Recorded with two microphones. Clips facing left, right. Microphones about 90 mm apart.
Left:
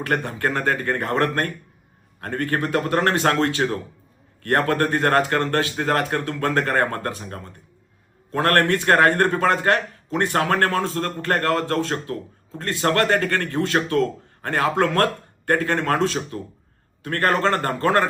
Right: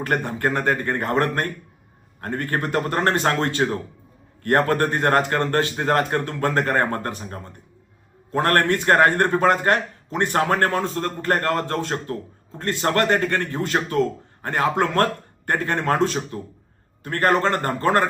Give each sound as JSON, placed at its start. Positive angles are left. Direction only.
{"t": 0.3, "sound": "a man's voice", "side_deg": -25}
{"t": 14.4, "sound": "a man's voice", "side_deg": -25}
{"t": 17.1, "sound": "speech", "side_deg": -20}